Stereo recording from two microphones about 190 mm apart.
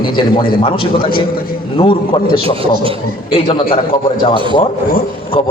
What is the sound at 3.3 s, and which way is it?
Speech, 25° left (ahead or behind).